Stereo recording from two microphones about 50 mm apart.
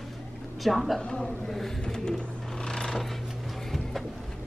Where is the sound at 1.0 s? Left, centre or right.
Centre.